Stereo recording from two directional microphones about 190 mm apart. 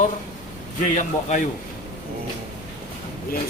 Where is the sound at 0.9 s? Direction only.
40° left (ahead or behind).